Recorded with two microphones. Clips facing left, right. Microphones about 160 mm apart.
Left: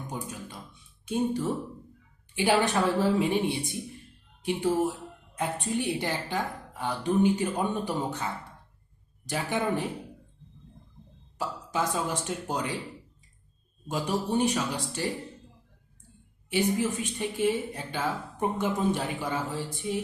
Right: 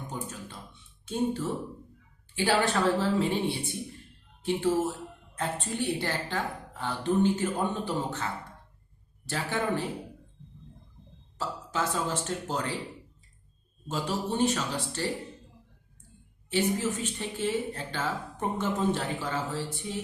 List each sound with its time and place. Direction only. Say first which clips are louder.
0.1 s music: left 2 dB; 15° left (ahead or behind)
1.0 s speech: left 2 dB; 15° left (ahead or behind)
11.3 s speech: left 1 dB; 15° left (ahead or behind)
13.8 s speech: left 2 dB; 15° left (ahead or behind)
16.5 s speech: left 1 dB; 15° left (ahead or behind)